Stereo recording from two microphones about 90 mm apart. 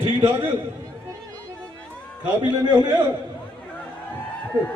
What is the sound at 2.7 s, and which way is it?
Speech, 55° right (ahead or behind).